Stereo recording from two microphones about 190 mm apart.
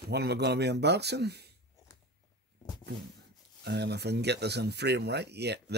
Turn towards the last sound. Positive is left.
turn(degrees=-60)  # may be behind; listen again after turning